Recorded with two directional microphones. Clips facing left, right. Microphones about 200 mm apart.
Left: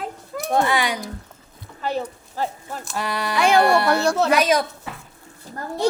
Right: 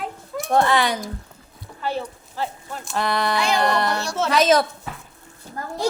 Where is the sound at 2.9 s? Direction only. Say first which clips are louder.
Right 2 dB; 10° left (ahead or behind).